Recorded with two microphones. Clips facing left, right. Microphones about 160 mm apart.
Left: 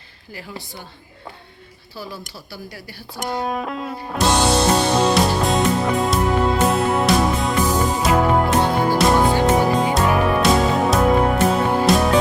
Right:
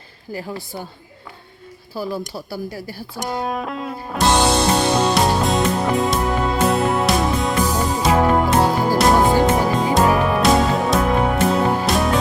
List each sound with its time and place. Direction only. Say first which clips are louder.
0.3 s a woman's voice: right 6 dB; 40° right (ahead or behind)
2.0 s speech: right 7 dB; 50° right (ahead or behind)
3.2 s music: even; centre (ahead or behind)